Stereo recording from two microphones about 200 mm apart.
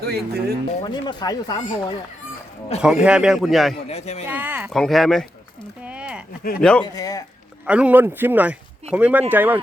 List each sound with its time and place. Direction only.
0.0 s speech: 50° right (ahead or behind)
0.8 s speech: 20° left (ahead or behind)
2.8 s a man's voice: 5° right (ahead or behind)
3.8 s speech: 35° left (ahead or behind)
4.3 s speech: 10° right (ahead or behind)
4.7 s a man's voice: centre (ahead or behind)
5.8 s a sound: 5° right (ahead or behind)
6.6 s a man's voice: 5° left (ahead or behind)
6.8 s a man's voice: 20° left (ahead or behind)
7.7 s speech: 5° right (ahead or behind)